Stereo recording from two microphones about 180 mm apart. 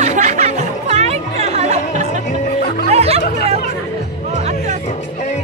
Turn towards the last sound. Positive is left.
turn(degrees=-35)  # may be behind; listen again after turning